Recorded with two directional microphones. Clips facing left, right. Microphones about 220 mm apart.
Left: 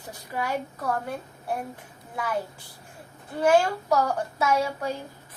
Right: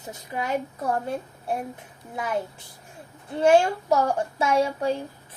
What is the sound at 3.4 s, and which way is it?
A woman's voice, 25° right (ahead or behind).